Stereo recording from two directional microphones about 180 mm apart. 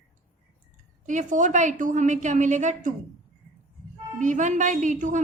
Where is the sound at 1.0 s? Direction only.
45° right (ahead or behind).